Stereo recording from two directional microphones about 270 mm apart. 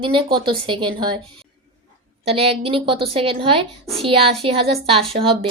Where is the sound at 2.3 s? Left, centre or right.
Right.